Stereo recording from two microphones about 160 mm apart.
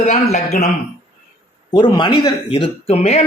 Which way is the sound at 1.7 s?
30° left (ahead or behind).